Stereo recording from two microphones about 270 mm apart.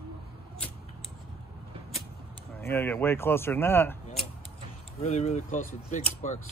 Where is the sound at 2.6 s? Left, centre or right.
Centre.